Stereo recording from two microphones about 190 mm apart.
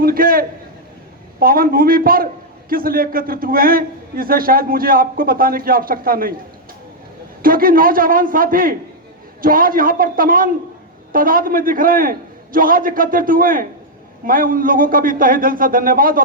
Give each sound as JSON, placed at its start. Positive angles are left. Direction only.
{"t": 0.0, "sound": "a man's voice", "side_deg": -50}
{"t": 7.4, "sound": "a man's voice", "side_deg": -50}